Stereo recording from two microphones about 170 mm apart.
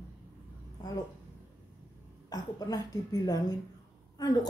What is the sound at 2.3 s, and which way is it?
A woman's voice, 25° left (ahead or behind).